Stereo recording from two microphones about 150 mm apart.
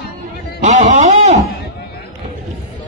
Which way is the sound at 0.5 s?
50° right (ahead or behind).